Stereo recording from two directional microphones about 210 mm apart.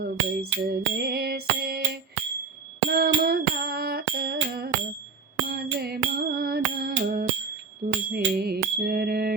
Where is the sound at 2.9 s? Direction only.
50° right (ahead or behind).